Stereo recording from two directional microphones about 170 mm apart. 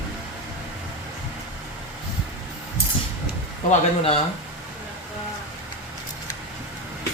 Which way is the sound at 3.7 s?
35° left (ahead or behind).